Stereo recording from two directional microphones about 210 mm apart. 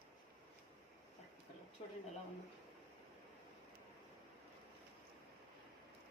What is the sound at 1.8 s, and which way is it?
Speech, 30° left (ahead or behind).